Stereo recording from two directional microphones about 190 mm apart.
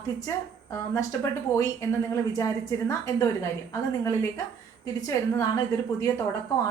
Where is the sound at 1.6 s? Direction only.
15° left (ahead or behind).